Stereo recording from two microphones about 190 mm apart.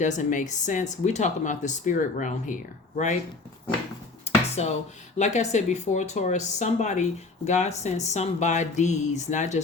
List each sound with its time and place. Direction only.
0.0 s speech: 40° left (ahead or behind)
4.6 s speech: 35° left (ahead or behind)